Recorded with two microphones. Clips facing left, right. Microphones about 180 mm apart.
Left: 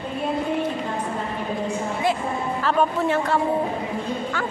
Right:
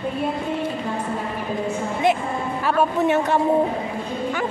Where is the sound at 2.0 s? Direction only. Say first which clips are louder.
Right 4 dB; 20° right (ahead or behind).